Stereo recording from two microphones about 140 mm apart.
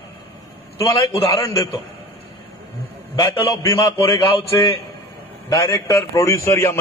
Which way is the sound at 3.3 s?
25° left (ahead or behind).